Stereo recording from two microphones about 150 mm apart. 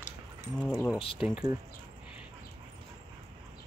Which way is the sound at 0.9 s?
35° left (ahead or behind).